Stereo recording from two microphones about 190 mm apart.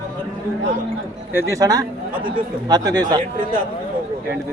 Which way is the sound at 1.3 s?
15° right (ahead or behind).